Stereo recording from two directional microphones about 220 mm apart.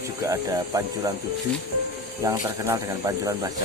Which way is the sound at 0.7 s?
15° right (ahead or behind).